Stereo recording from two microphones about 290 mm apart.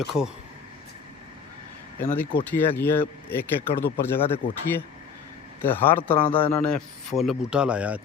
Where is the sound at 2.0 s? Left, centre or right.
Centre.